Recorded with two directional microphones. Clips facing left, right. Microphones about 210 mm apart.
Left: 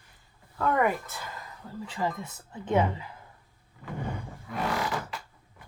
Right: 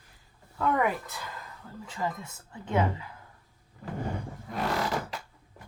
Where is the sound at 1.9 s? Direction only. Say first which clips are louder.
Left 2 dB; 30° left (ahead or behind).